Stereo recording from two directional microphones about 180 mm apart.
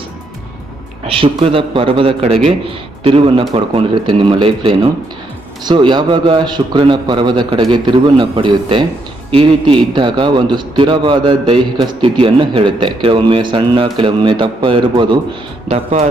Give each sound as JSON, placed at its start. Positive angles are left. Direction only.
{"t": 1.0, "sound": "a man's voice", "side_deg": -30}
{"t": 15.7, "sound": "a man's voice", "side_deg": -35}